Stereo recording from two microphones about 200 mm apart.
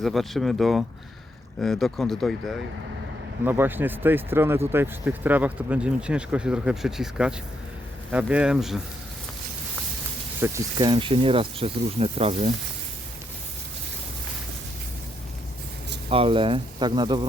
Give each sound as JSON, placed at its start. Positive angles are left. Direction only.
{"t": 0.0, "sound": "speech", "side_deg": 0}
{"t": 3.4, "sound": "speech", "side_deg": -10}
{"t": 10.4, "sound": "speech", "side_deg": -15}
{"t": 10.8, "sound": "speech", "side_deg": -25}
{"t": 16.0, "sound": "speech", "side_deg": -25}